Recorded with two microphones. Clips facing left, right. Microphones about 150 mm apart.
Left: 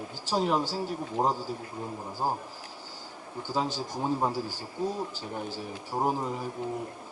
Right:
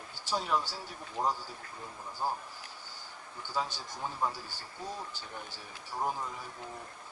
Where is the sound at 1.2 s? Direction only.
35° left (ahead or behind).